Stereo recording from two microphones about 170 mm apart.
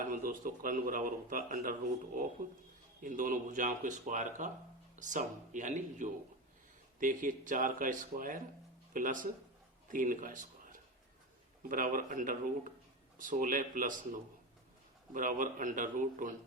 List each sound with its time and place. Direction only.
0.0 s a man's voice: 55° right (ahead or behind)
3.0 s a man's voice: 50° right (ahead or behind)